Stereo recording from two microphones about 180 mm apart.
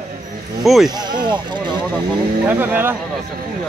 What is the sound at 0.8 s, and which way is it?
Speech, 25° right (ahead or behind).